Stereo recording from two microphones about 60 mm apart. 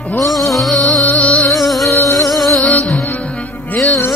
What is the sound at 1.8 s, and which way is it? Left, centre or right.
Music, left.